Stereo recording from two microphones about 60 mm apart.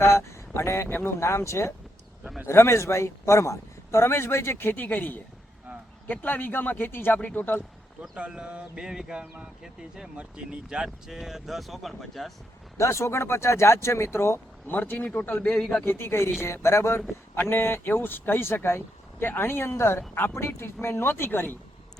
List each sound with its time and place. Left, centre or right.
0.0 s speech: left
0.9 s speech: left
1.2 s a man's voice: left
8.1 s speech: centre
12.7 s a man's voice: left
14.7 s speech: left
15.8 s a man's voice: left
17.3 s speech: left